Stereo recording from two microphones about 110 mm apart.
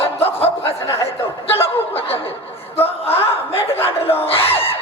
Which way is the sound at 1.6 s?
60° left (ahead or behind).